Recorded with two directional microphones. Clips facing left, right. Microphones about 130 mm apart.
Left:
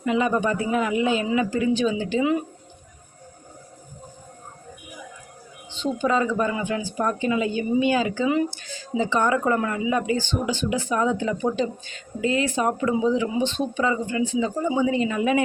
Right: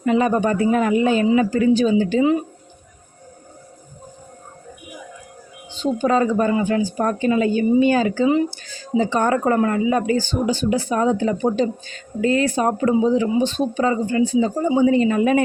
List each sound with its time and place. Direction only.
0.0 s speech: 45° right (ahead or behind)
5.7 s speech: 40° right (ahead or behind)